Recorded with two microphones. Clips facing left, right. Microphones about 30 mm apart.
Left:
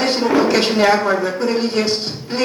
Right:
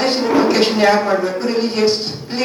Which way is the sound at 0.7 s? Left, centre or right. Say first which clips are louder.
Right 1 dB; centre.